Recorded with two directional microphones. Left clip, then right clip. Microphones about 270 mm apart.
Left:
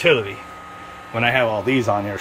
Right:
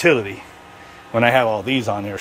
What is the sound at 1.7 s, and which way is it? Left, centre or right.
Speech, centre.